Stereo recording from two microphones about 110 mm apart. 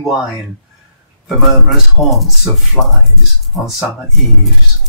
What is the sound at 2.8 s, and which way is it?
Speech, 15° left (ahead or behind).